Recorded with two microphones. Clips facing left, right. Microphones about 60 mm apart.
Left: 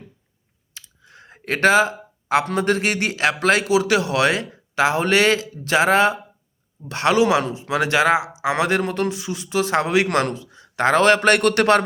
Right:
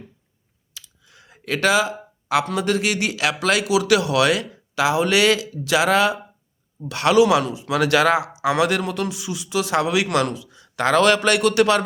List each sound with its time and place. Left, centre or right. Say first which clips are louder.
0.7 s computer keyboard: left 1 dB; left
2.3 s a man's voice: left 1 dB; left